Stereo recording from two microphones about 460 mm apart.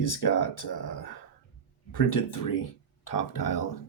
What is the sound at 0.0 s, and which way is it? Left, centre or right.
Speech, left.